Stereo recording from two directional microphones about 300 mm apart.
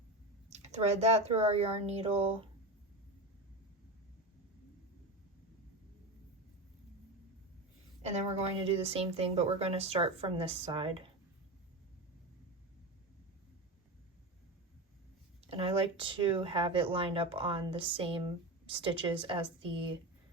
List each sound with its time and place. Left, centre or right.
0.5 s speech: right
8.0 s speech: right
15.4 s speech: centre